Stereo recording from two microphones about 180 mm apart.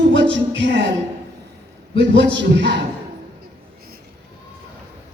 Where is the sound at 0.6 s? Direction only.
80° right.